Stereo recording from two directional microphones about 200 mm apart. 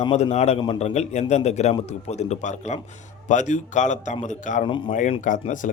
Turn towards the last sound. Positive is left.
turn(degrees=40)  # may be behind; listen again after turning